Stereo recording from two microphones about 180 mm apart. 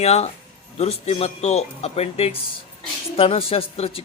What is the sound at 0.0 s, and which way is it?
Speech, 35° left (ahead or behind).